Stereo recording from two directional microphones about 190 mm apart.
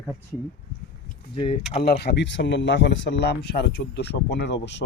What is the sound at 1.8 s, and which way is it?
Speech, 60° left (ahead or behind).